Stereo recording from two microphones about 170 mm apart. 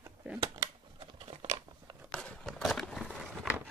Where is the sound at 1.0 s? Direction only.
35° right (ahead or behind).